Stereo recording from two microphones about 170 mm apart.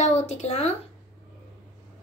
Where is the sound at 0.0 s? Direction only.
45° left (ahead or behind).